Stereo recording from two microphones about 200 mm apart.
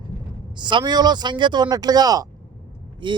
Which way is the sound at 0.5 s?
20° right (ahead or behind).